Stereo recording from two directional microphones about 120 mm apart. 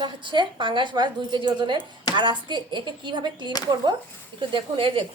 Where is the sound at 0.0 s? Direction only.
40° right (ahead or behind).